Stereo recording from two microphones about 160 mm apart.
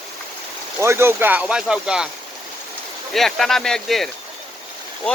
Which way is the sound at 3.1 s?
Centre (ahead or behind).